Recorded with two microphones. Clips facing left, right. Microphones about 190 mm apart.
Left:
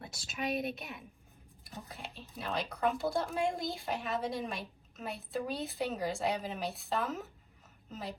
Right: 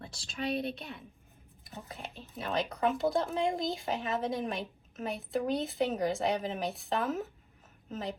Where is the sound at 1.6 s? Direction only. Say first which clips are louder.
Right 2 dB; 15° right (ahead or behind).